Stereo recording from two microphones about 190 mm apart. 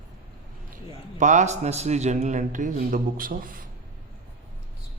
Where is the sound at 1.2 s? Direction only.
40° right (ahead or behind).